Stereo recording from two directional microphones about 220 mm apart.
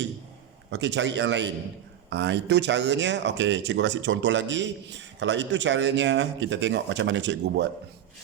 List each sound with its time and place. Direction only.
0.7 s a man's voice: 55° right (ahead or behind)